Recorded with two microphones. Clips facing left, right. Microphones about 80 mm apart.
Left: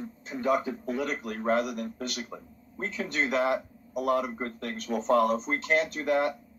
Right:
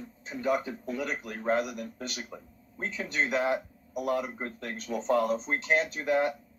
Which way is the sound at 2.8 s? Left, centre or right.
Centre.